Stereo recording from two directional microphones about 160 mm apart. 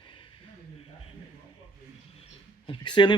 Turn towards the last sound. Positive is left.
turn(degrees=30)  # may be behind; listen again after turning